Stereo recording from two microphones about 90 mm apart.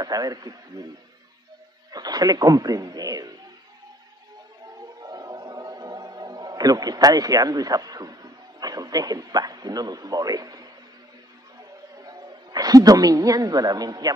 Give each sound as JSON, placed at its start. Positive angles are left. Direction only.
{"t": 0.0, "sound": "a man's voice", "side_deg": -45}
{"t": 1.9, "sound": "speech", "side_deg": -45}
{"t": 4.7, "sound": "music", "side_deg": -45}
{"t": 12.0, "sound": "a woman's voice", "side_deg": -45}